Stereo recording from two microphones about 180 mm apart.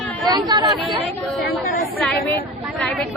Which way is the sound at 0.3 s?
25° right (ahead or behind).